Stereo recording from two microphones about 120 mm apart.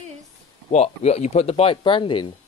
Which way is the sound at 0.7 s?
65° left (ahead or behind).